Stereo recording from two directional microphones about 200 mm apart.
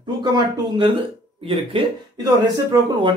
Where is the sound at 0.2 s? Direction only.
25° right (ahead or behind).